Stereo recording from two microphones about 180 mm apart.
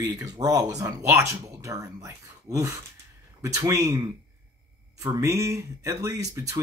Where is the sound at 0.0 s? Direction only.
20° right (ahead or behind).